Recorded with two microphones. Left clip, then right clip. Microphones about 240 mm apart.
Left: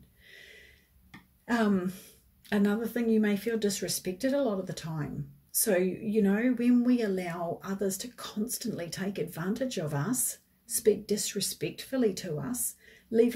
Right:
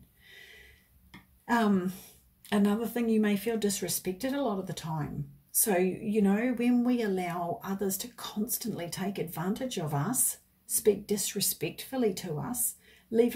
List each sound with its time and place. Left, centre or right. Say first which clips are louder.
1.4 s a woman's voice: right 1 dB; centre